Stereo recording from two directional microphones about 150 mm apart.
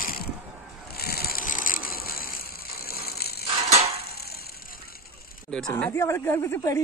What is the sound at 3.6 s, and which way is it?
Mechanisms, 45° right (ahead or behind).